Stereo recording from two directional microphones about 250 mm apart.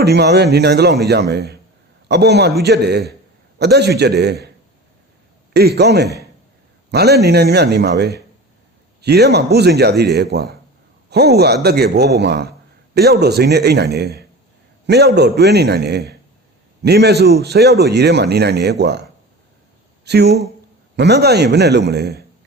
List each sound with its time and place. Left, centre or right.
0.0 s a man's voice: right
5.5 s a man's voice: right
20.1 s a man's voice: right